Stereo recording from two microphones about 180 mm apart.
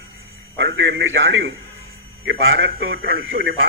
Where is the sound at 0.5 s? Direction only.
90° right; by 3.3 s 75° right (ahead or behind).